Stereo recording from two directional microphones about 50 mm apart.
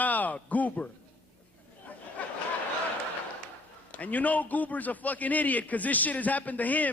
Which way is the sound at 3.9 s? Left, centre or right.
Left.